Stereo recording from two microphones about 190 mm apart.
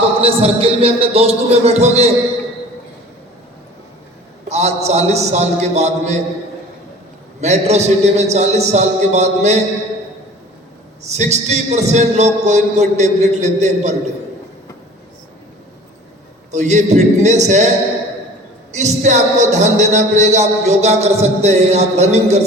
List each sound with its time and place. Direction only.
0.2 s speech: 30° right (ahead or behind)
4.4 s speech: 35° right (ahead or behind)
7.4 s speech: 35° right (ahead or behind)
11.1 s speech: 35° right (ahead or behind)
16.5 s speech: 40° right (ahead or behind)
18.7 s speech: 35° right (ahead or behind)